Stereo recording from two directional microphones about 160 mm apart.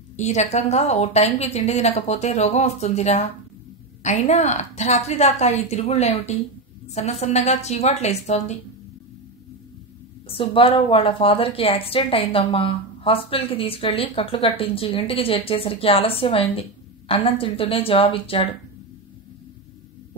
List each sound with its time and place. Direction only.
0.2 s a woman's voice: 45° left (ahead or behind)
10.2 s a woman's voice: 35° left (ahead or behind)